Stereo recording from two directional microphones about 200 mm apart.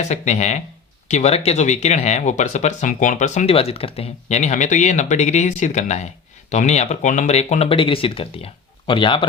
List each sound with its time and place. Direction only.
0.0 s a man's voice: 35° left (ahead or behind)